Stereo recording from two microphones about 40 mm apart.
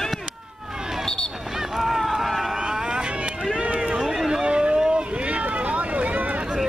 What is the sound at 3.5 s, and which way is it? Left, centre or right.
Run, right.